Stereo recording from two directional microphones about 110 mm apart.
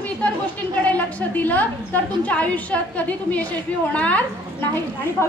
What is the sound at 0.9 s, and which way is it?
A woman's voice, 15° left (ahead or behind).